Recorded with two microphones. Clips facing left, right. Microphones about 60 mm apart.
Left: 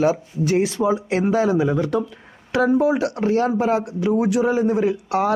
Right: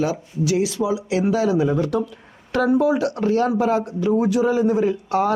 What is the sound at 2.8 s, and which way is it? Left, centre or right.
Speech, left.